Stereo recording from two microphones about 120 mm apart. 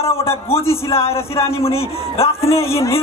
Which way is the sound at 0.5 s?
20° left (ahead or behind).